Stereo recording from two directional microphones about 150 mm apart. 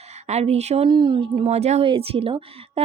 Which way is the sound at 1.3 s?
45° right (ahead or behind).